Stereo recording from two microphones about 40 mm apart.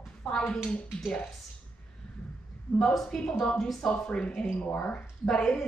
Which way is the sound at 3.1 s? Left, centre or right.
Left.